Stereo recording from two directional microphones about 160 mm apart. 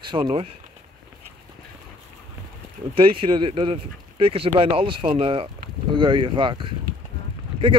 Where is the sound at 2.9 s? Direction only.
35° right (ahead or behind).